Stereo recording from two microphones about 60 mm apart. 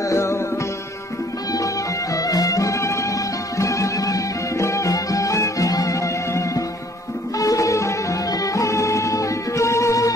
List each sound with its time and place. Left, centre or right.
0.1 s music: left
2.1 s music: left